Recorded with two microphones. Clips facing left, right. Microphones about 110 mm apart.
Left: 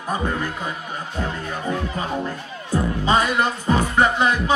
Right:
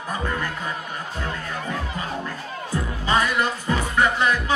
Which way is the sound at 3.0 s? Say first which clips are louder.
Left 1 dB; 25° left (ahead or behind).